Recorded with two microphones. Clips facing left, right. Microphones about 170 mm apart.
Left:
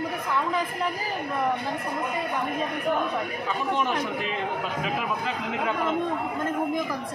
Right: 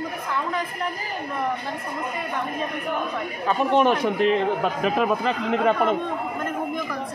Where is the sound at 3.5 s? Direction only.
65° right (ahead or behind).